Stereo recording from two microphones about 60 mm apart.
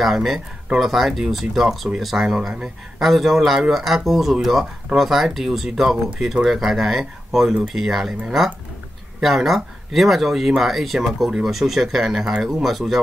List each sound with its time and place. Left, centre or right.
0.0 s speech: centre
9.2 s speech: centre